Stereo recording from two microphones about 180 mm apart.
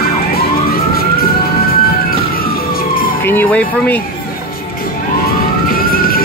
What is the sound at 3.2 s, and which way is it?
Speech, 10° left (ahead or behind).